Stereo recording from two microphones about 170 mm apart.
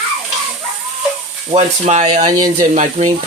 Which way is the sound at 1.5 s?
40° right (ahead or behind).